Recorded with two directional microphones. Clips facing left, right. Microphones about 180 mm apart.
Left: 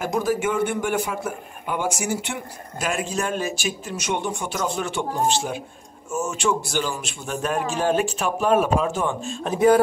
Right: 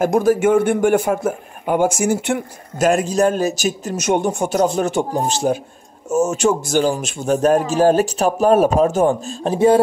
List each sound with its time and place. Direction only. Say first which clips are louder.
0.0 s a man's voice: right 8 dB; 50° right (ahead or behind); by 9.8 s 30° right (ahead or behind)